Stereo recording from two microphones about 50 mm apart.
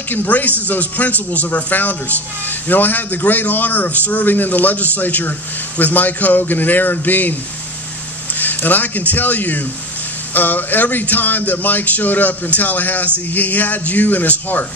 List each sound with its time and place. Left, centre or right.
0.1 s speech: left
8.4 s speech: left